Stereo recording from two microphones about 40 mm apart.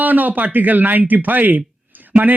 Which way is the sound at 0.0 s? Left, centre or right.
Right.